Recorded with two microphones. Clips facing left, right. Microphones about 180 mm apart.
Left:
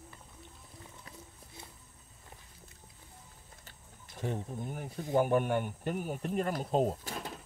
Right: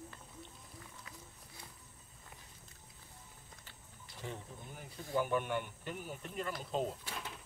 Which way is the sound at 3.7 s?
50° left (ahead or behind).